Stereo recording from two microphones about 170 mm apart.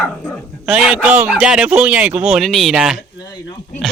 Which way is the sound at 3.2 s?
20° left (ahead or behind).